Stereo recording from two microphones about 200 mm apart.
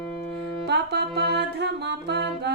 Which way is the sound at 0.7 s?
55° right (ahead or behind).